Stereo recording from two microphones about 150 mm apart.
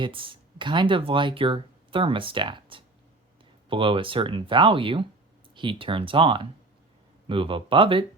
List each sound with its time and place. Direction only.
0.0 s speech: 35° right (ahead or behind)